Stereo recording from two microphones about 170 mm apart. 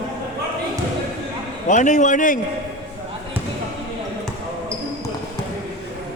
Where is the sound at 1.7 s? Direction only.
45° left (ahead or behind).